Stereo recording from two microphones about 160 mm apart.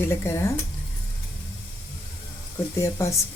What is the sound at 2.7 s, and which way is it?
Speech, 15° left (ahead or behind).